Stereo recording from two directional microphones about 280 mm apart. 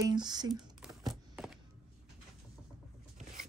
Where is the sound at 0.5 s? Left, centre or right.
Centre.